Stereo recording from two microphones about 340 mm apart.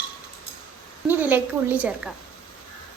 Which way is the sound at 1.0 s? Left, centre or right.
Centre.